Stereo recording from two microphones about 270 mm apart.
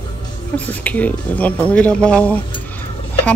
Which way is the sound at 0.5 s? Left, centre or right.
Centre.